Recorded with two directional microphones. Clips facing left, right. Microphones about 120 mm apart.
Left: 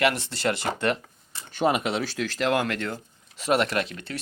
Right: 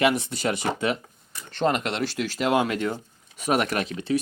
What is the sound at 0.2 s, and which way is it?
Speech, 80° left.